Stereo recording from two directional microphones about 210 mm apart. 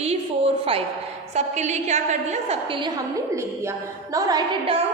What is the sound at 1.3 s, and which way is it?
A woman's voice, 35° right (ahead or behind).